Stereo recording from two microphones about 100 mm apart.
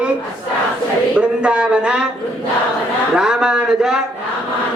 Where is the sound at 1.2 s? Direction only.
10° right (ahead or behind).